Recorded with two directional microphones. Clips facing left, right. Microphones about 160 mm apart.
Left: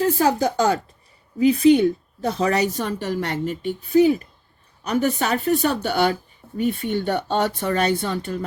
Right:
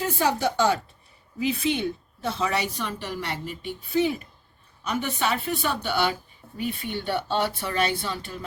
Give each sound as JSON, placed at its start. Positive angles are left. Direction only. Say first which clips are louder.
{"t": 0.2, "sound": "a woman's voice", "louder": "left 4 dB", "side_deg": 40}